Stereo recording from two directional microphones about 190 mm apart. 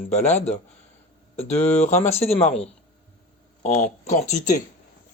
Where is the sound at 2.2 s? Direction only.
30° left (ahead or behind).